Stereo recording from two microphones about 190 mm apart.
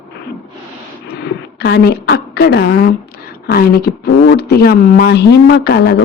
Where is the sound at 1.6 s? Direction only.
60° left (ahead or behind).